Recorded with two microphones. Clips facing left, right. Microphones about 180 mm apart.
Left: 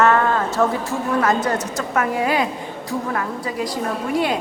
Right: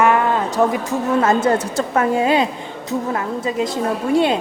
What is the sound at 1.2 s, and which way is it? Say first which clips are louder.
A woman's voice: right 4 dB; 25° right (ahead or behind).